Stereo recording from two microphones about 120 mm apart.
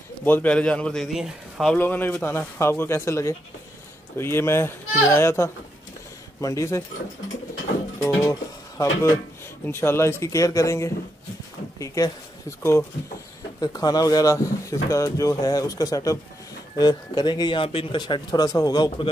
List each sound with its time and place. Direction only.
0.2 s a man's voice: 15° left (ahead or behind)
1.8 s speech: 15° left (ahead or behind)
8.0 s music: 30° left (ahead or behind)
9.7 s speech: 20° left (ahead or behind); by 19.0 s 35° left (ahead or behind)